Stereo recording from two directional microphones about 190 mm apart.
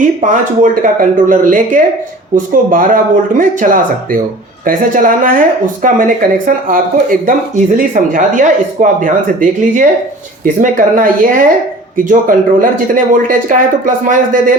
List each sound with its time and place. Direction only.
0.0 s speech: 45° right (ahead or behind)